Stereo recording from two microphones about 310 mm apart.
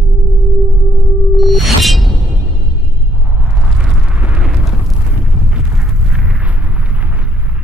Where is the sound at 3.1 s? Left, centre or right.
Centre.